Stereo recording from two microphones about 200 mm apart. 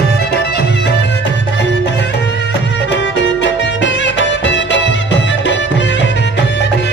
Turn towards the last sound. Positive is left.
turn(degrees=65)  # may be behind; listen again after turning